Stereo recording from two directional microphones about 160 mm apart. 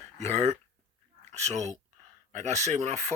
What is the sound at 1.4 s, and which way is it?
Speech, 45° right (ahead or behind).